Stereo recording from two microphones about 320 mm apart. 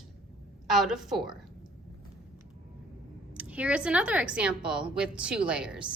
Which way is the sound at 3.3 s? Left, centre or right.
Centre.